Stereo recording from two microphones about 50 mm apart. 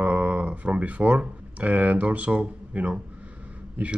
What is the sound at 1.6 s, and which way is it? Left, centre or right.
Speech, right.